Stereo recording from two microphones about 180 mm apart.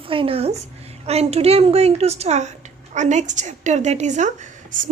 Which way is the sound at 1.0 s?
35° right (ahead or behind).